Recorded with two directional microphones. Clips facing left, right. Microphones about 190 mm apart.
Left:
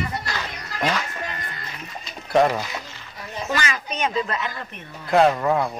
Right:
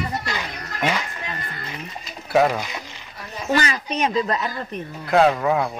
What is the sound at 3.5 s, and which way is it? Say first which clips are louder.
A woman's voice: right 6 dB; 35° right (ahead or behind).